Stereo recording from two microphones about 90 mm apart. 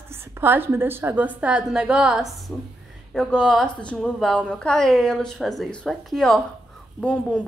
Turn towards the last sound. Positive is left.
turn(degrees=15)  # may be behind; listen again after turning